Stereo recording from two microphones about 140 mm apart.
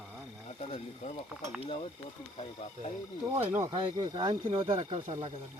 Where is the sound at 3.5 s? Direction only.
15° right (ahead or behind).